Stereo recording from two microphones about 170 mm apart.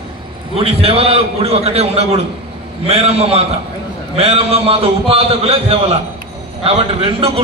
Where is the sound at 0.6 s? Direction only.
35° right (ahead or behind).